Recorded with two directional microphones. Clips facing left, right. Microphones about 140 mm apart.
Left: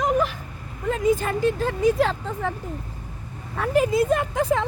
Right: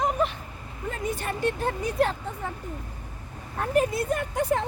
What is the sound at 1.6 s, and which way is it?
Speech, 90° left.